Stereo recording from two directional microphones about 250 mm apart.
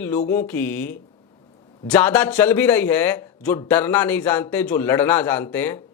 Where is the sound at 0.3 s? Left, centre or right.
Centre.